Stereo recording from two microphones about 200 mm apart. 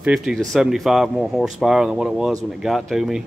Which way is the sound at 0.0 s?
5° right (ahead or behind).